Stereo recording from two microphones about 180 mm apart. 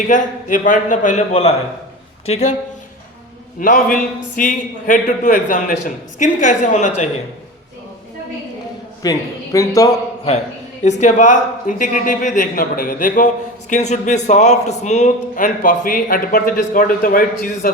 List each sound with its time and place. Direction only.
0.1 s speech: 50° left (ahead or behind)
3.6 s speech: 50° left (ahead or behind)
9.0 s a man's voice: 20° left (ahead or behind)
10.8 s speech: 40° left (ahead or behind)